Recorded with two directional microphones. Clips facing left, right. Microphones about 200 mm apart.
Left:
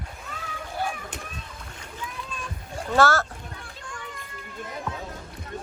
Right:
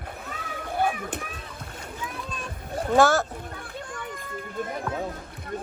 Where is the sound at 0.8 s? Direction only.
55° right (ahead or behind).